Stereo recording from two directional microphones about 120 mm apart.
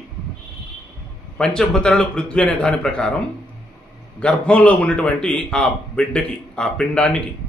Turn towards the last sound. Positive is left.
turn(degrees=10)  # may be behind; listen again after turning